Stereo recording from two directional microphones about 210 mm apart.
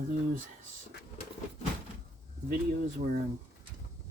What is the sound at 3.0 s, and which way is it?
Speech, 40° right (ahead or behind).